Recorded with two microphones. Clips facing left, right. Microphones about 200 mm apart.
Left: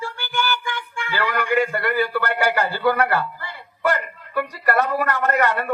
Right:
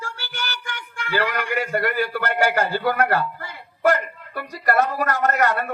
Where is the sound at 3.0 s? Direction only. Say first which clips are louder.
Even; 45° right (ahead or behind).